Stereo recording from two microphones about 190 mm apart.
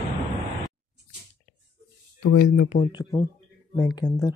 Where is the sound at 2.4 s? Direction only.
50° left (ahead or behind).